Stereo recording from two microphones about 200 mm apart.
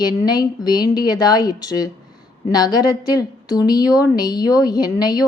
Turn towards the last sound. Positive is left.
turn(degrees=20)  # may be behind; listen again after turning